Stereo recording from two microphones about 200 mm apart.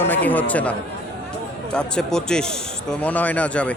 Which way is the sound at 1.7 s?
5° left (ahead or behind).